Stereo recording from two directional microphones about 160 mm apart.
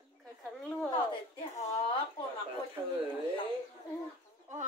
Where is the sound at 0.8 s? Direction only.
30° left (ahead or behind).